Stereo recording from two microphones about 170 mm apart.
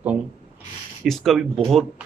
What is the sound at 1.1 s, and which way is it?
Speech, centre (ahead or behind).